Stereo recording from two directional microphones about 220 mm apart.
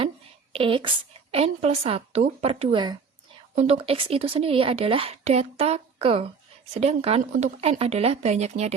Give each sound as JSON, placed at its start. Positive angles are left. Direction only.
{"t": 0.5, "sound": "speech", "side_deg": -25}